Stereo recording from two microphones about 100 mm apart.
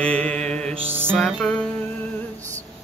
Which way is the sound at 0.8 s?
20° right (ahead or behind).